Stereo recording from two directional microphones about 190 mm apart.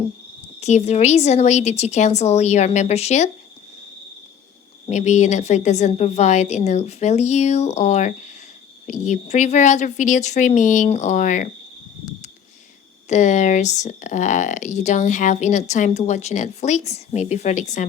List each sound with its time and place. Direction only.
0.6 s speech: 35° left (ahead or behind)
4.9 s speech: 40° left (ahead or behind)
13.1 s speech: 40° left (ahead or behind)